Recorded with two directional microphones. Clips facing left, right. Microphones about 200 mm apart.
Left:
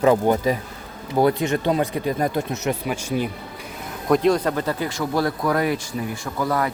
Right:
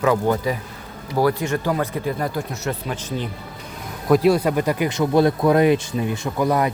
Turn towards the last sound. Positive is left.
turn(degrees=-20)  # may be behind; listen again after turning